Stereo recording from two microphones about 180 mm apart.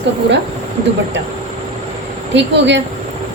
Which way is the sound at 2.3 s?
80° right.